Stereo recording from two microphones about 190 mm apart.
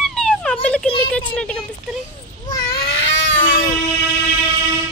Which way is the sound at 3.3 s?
45° left (ahead or behind).